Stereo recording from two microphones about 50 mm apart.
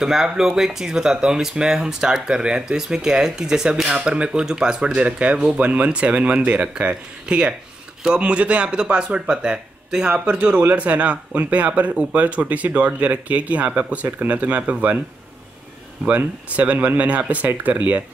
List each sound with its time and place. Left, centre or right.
0.0 s speech: centre
5.0 s speech: right
16.5 s speech: right